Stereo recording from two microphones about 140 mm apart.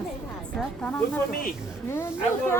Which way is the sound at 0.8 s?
10° left (ahead or behind).